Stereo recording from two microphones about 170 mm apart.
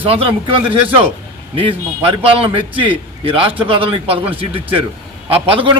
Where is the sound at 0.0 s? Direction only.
35° right (ahead or behind).